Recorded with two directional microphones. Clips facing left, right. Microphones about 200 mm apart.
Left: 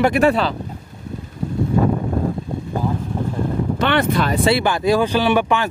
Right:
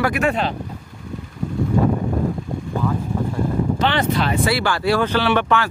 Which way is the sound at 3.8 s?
55° left (ahead or behind).